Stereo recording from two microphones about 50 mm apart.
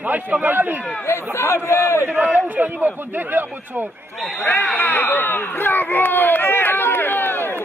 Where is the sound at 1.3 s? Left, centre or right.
Left.